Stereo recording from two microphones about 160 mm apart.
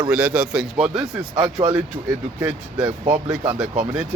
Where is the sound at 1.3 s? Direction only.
30° right (ahead or behind).